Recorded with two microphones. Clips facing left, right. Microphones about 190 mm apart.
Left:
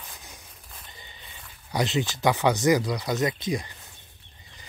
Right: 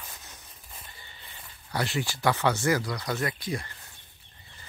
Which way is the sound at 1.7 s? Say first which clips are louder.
Left 4 dB; 20° left (ahead or behind).